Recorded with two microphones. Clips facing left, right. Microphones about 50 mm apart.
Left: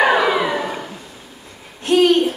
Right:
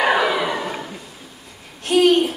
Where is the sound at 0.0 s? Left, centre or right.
Centre.